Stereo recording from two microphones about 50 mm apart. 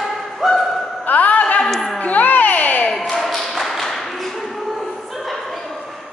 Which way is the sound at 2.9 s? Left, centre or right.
Centre.